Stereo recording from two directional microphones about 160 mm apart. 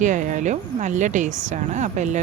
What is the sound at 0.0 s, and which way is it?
A woman's voice, 50° right (ahead or behind).